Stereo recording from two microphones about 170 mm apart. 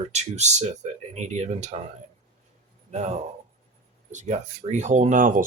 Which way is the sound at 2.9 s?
40° right (ahead or behind).